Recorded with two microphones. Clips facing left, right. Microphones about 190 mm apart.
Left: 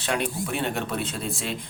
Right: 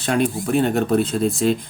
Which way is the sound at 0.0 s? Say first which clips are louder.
Right 7 dB; 40° right (ahead or behind).